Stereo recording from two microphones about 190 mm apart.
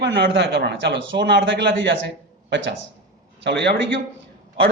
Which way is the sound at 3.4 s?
65° right (ahead or behind).